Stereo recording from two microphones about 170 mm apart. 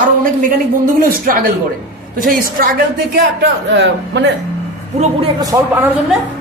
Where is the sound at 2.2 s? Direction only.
60° right (ahead or behind).